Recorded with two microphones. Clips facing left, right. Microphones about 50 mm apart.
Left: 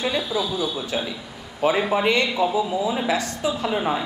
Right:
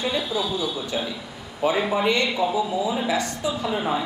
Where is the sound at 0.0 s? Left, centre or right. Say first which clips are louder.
Left 1 dB; centre.